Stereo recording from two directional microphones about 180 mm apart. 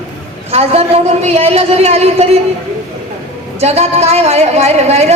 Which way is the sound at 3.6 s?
35° right (ahead or behind).